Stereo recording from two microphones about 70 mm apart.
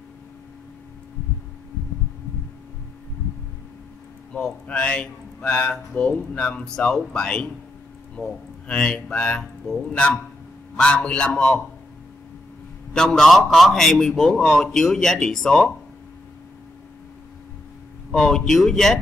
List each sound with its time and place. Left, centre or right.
4.3 s a man's voice: centre
9.4 s speech: centre
9.9 s a man's voice: centre
12.9 s a man's voice: centre
18.1 s a man's voice: centre